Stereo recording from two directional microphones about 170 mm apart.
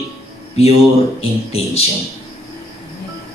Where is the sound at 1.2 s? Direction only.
35° left (ahead or behind).